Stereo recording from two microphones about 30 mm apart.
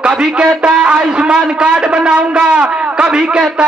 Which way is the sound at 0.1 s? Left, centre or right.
Right.